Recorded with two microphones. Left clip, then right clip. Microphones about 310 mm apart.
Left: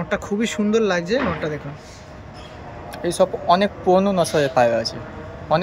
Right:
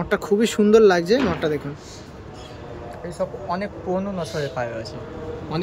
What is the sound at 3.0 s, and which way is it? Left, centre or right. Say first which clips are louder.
Speech: left 10 dB; left.